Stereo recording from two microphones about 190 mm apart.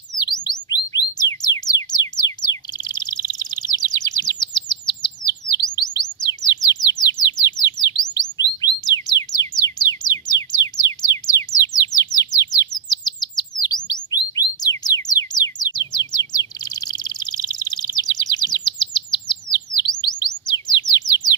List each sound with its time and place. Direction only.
0.2 s bird: 20° left (ahead or behind)
8.8 s music: 20° left (ahead or behind)
16.3 s bird: 20° left (ahead or behind)